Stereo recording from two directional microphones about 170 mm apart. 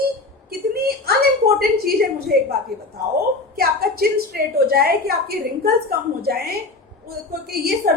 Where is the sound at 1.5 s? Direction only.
65° right (ahead or behind).